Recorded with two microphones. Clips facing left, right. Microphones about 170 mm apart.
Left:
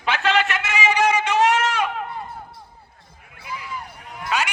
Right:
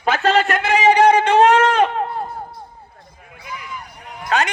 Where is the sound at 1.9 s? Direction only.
35° right (ahead or behind).